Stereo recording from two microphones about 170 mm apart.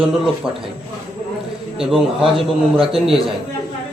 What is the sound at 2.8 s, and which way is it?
Mantra, centre (ahead or behind).